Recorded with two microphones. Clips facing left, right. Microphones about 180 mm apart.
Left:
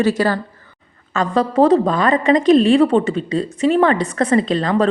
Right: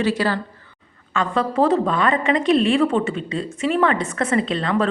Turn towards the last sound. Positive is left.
turn(degrees=35)  # may be behind; listen again after turning